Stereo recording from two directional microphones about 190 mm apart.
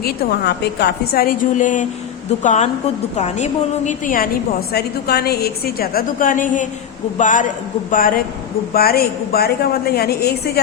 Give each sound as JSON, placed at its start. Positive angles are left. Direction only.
{"t": 0.0, "sound": "a woman's voice", "side_deg": 55}
{"t": 4.7, "sound": "a woman's voice", "side_deg": 55}